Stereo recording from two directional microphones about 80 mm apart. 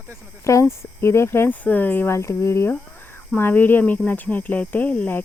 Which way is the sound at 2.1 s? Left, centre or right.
Left.